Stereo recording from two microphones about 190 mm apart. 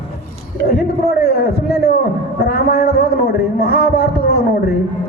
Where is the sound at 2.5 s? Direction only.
55° left (ahead or behind).